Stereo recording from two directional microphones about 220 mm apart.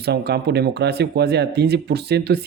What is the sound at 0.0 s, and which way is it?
Speech, 50° right (ahead or behind).